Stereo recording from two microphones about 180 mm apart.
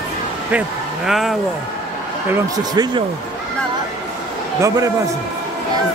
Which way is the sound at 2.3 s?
20° right (ahead or behind).